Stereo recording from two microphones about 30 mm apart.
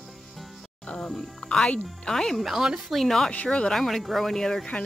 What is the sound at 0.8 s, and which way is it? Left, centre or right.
Speech, left.